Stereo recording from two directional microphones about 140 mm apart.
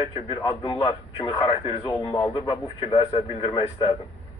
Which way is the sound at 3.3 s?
45° left (ahead or behind).